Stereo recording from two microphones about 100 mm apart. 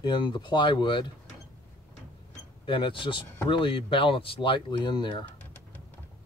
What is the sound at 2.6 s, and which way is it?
Speech, 55° left (ahead or behind).